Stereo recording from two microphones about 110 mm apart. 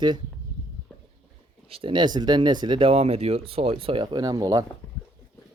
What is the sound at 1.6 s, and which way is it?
Speech, 60° right (ahead or behind).